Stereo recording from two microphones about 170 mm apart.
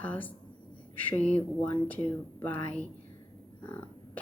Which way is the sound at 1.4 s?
10° left (ahead or behind).